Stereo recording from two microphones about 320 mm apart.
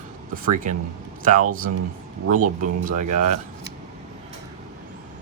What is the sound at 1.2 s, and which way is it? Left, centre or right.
A man's voice, right.